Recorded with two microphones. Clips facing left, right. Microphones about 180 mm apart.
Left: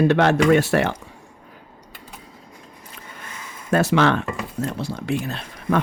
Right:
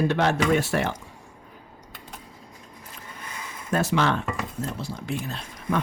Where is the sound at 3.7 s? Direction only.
70° left (ahead or behind).